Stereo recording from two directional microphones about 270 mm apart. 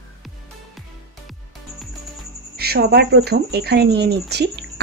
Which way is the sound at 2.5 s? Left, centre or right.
Right.